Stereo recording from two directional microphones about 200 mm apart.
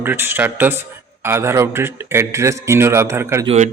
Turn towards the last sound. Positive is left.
turn(degrees=-35)  # may be behind; listen again after turning